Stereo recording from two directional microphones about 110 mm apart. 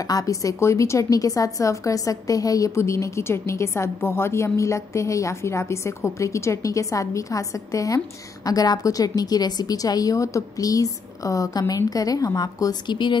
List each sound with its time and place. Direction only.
0.0 s a woman's voice: 35° left (ahead or behind)